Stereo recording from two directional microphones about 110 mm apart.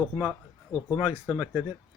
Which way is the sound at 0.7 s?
35° left (ahead or behind).